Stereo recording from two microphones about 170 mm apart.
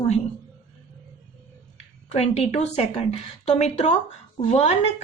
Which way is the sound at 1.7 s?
40° left (ahead or behind).